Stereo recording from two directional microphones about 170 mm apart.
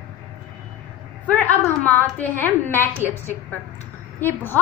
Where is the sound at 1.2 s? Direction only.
10° left (ahead or behind).